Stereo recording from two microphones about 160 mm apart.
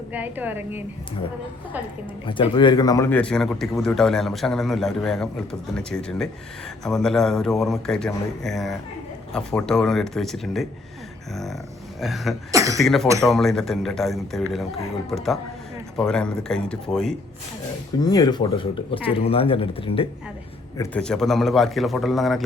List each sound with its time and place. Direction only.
0.1 s a woman's voice: 10° right (ahead or behind)
2.2 s a man's voice: 30° left (ahead or behind)
3.1 s a man's voice: 5° left (ahead or behind)
11.9 s a man's voice: centre (ahead or behind)
12.5 s speech: 20° right (ahead or behind)
12.7 s a man's voice: centre (ahead or behind)
18.0 s speech: 25° left (ahead or behind)
20.9 s a man's voice: 5° left (ahead or behind)